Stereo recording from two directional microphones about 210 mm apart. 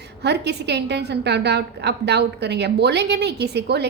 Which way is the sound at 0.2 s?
55° right (ahead or behind).